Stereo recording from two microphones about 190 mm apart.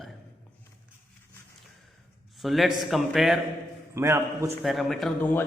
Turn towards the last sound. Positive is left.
turn(degrees=0)  # may be behind; listen again after turning